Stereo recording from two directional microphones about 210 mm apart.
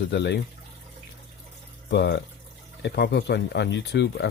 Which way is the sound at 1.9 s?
55° left (ahead or behind).